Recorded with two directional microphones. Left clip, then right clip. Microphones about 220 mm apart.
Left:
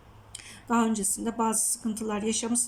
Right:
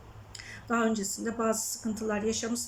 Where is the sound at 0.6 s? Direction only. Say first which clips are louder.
Left 2 dB; 15° left (ahead or behind).